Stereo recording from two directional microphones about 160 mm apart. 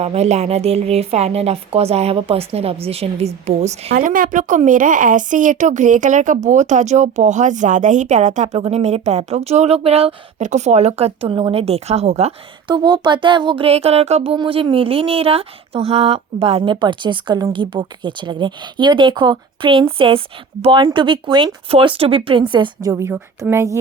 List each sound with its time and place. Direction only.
0.0 s speech: 40° right (ahead or behind)
3.9 s a woman's voice: 60° right (ahead or behind); by 12.3 s 40° right (ahead or behind)
12.6 s speech: 30° right (ahead or behind)